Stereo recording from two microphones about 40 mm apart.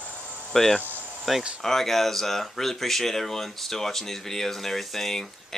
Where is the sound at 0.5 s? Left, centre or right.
Centre.